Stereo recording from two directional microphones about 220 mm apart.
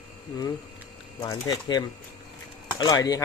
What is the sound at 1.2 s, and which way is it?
Chopping, 15° left (ahead or behind).